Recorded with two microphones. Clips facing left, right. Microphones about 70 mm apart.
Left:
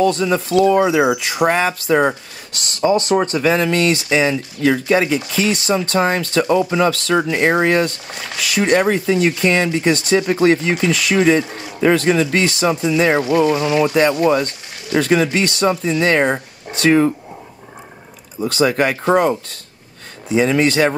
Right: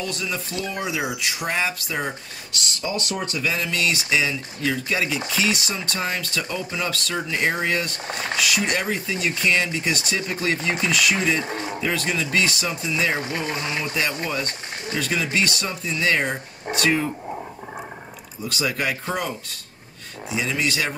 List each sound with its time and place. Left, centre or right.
0.0 s speech: left
2.8 s speech: left
6.8 s speech: left
7.2 s speech: left
8.1 s speech: right
8.4 s speech: left
11.4 s speech: right
11.8 s speech: left
13.2 s speech: right
13.6 s speech: left
18.4 s speech: left
20.3 s speech: left